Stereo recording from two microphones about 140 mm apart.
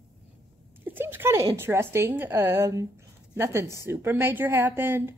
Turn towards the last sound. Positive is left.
turn(degrees=-15)  # may be behind; listen again after turning